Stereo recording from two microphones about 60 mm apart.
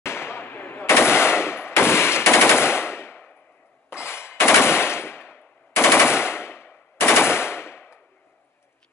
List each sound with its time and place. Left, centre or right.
0.0 s machine gun: left